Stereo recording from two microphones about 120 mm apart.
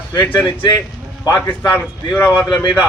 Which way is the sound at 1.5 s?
15° left (ahead or behind).